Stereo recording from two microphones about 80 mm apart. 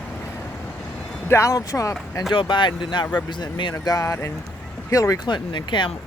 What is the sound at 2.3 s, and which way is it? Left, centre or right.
Speech, left.